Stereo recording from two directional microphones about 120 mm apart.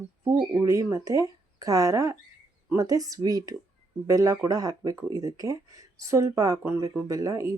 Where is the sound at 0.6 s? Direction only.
25° right (ahead or behind).